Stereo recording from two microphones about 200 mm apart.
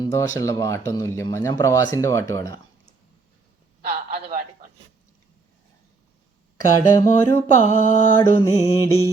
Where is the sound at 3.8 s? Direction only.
45° right (ahead or behind).